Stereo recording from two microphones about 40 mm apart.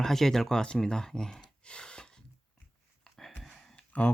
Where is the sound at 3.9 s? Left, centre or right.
Left.